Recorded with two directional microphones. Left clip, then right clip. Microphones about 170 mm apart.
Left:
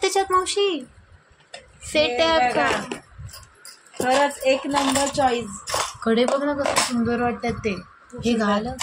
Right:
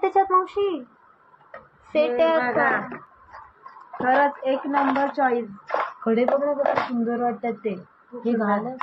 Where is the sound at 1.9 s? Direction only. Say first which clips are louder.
Left 1 dB; 35° left (ahead or behind).